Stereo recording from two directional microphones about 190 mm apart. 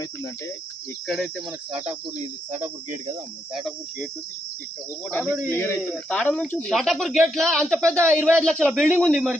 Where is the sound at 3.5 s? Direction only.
Centre (ahead or behind).